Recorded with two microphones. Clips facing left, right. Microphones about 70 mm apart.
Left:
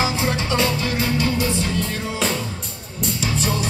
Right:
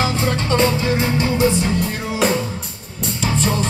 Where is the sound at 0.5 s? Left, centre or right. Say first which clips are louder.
Right 7 dB; right.